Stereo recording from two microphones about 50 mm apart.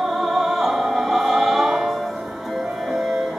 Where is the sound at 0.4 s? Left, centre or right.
Centre.